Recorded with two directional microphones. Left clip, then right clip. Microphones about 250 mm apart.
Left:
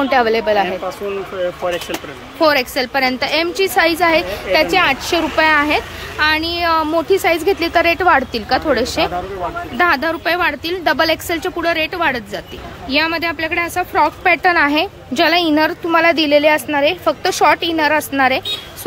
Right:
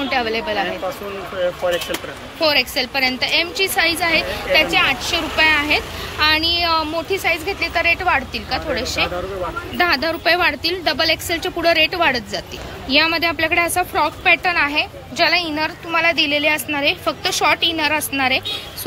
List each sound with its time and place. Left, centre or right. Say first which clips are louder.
0.1 s a woman's voice: left 6 dB; left
2.4 s a woman's voice: left 3 dB; centre
9.8 s a woman's voice: left 3 dB; centre